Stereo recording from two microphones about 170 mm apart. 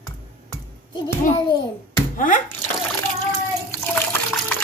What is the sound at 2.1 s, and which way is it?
Speech, 50° left (ahead or behind).